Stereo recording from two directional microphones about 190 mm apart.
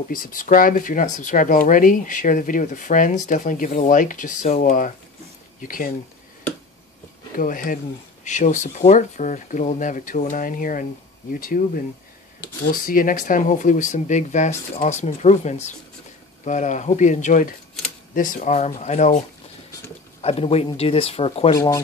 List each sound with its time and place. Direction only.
0.1 s speech: 45° left (ahead or behind)
7.3 s speech: 45° left (ahead or behind)
12.8 s speech: 45° left (ahead or behind); by 21.5 s 30° left (ahead or behind)
21.5 s speech: 15° left (ahead or behind)